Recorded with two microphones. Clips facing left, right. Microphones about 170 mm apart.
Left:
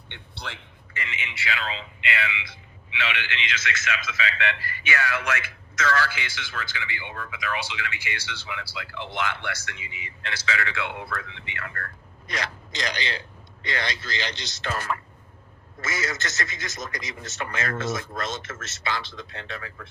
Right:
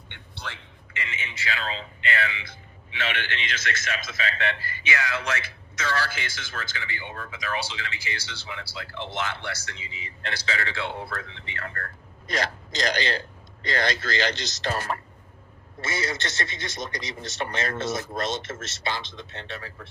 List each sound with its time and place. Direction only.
0.3 s a man's voice: 15° left (ahead or behind)
0.9 s speech: 35° right (ahead or behind)
4.9 s speech: 20° right (ahead or behind)
5.1 s a man's voice: 35° right (ahead or behind)
6.1 s speech: 45° right (ahead or behind)